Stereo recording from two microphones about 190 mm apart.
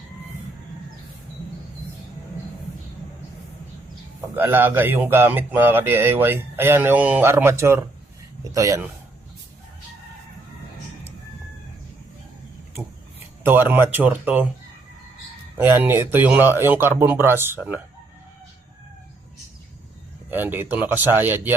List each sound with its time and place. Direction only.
4.4 s speech: 10° right (ahead or behind)
13.4 s speech: 10° right (ahead or behind)
15.5 s speech: 10° right (ahead or behind)
20.3 s speech: 10° right (ahead or behind)